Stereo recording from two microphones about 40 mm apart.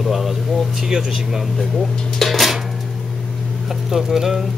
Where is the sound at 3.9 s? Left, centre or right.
Centre.